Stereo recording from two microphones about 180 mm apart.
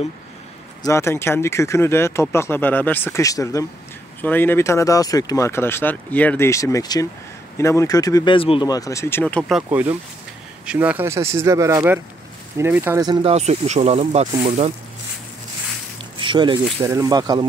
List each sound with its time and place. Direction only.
0.8 s speech: 15° left (ahead or behind)
9.4 s speech: 5° right (ahead or behind); by 13.3 s 20° right (ahead or behind)
13.3 s speech: 40° right (ahead or behind)
16.2 s squish: 25° right (ahead or behind)
16.8 s speech: 15° right (ahead or behind)